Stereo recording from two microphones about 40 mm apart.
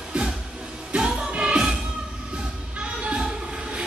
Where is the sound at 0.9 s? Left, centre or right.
Right.